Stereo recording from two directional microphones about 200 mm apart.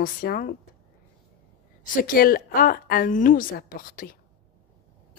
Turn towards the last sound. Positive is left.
turn(degrees=45)  # may be behind; listen again after turning